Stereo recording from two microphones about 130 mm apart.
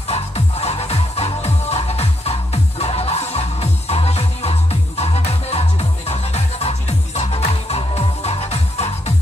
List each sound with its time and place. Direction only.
0.1 s music: 55° left (ahead or behind)